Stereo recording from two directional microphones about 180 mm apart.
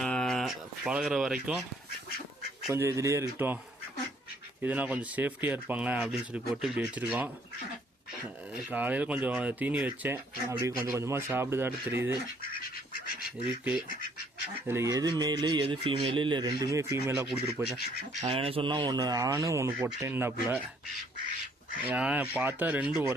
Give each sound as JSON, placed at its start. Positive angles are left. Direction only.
{"t": 0.0, "sound": "a sound", "side_deg": 5}
{"t": 2.6, "sound": "speech", "side_deg": -15}
{"t": 4.6, "sound": "speech", "side_deg": -10}
{"t": 8.5, "sound": "speech", "side_deg": -10}
{"t": 13.8, "sound": "duck", "side_deg": 50}
{"t": 14.7, "sound": "speech", "side_deg": -15}
{"t": 18.2, "sound": "speech", "side_deg": -35}
{"t": 21.8, "sound": "speech", "side_deg": -5}